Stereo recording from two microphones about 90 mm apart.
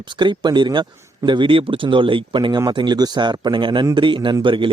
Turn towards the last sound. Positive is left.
turn(degrees=-65)  # may be behind; listen again after turning